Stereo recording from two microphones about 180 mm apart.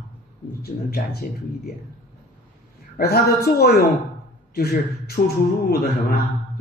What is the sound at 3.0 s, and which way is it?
Speech, 60° left (ahead or behind).